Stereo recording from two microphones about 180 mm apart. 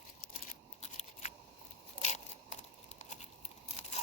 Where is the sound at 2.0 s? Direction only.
35° left (ahead or behind).